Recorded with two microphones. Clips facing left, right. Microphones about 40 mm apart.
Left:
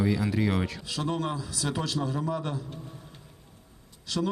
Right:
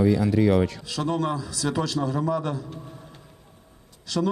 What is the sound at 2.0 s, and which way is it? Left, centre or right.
Speech, right.